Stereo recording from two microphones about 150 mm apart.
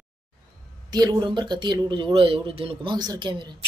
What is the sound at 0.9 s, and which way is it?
Speech, 25° right (ahead or behind).